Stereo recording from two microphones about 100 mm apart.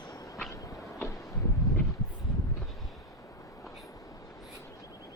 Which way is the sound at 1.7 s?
35° left (ahead or behind).